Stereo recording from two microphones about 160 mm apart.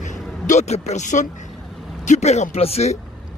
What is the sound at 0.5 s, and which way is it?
Speech, 45° left (ahead or behind).